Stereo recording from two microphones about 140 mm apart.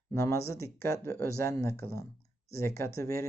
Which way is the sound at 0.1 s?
20° left (ahead or behind).